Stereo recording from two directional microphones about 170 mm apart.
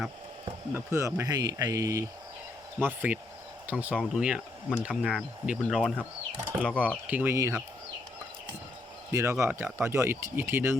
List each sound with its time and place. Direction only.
0.7 s speech: 15° right (ahead or behind); by 5.9 s centre (ahead or behind)
6.3 s speech: 15° right (ahead or behind)
6.6 s speech: 5° left (ahead or behind)
7.1 s speech: 10° right (ahead or behind)
9.1 s speech: 15° right (ahead or behind)